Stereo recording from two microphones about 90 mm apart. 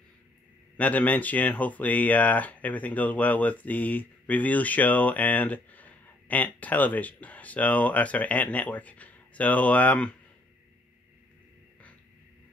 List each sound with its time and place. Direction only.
0.7 s speech: 15° left (ahead or behind)